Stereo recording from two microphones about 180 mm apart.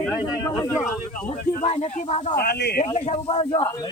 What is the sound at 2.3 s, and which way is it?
Speech, 60° left (ahead or behind).